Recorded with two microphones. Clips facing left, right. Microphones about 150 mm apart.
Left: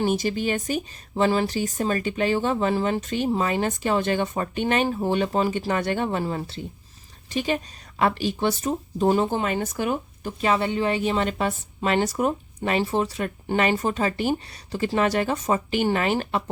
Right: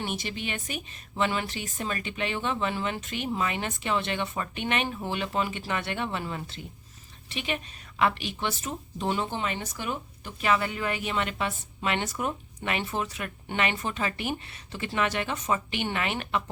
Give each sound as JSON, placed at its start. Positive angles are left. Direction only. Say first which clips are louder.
{"t": 0.0, "sound": "speech", "louder": "left 10 dB", "side_deg": 40}
{"t": 10.4, "sound": "speech", "louder": "left 4 dB", "side_deg": 30}